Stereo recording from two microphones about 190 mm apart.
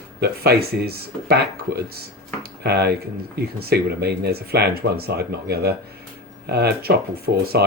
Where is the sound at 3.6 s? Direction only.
55° right (ahead or behind).